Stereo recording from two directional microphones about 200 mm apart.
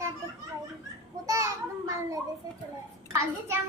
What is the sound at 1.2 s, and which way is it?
Speech, 15° right (ahead or behind).